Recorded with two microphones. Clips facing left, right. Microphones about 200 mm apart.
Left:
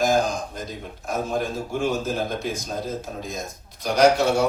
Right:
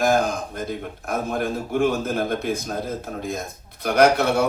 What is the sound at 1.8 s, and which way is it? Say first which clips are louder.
Speech: right 3 dB; 55° right (ahead or behind).